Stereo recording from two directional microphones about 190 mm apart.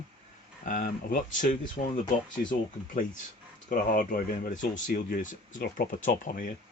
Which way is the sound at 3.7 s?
45° left (ahead or behind).